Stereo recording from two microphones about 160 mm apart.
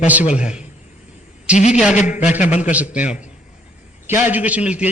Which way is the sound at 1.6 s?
45° left (ahead or behind).